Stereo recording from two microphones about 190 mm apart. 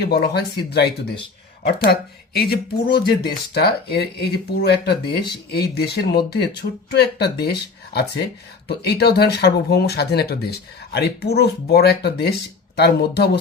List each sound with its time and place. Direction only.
0.0 s speech: 60° left (ahead or behind)
1.6 s speech: 55° left (ahead or behind)